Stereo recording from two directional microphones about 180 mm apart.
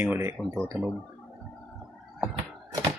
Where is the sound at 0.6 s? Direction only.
5° left (ahead or behind).